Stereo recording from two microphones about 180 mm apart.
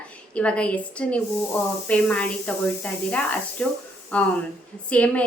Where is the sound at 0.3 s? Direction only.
5° left (ahead or behind).